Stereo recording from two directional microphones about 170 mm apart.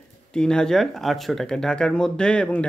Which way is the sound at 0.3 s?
5° left (ahead or behind).